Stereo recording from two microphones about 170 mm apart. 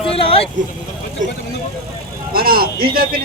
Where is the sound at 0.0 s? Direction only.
35° left (ahead or behind).